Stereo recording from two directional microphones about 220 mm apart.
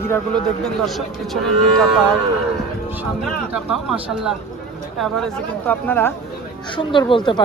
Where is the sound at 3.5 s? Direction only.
5° right (ahead or behind).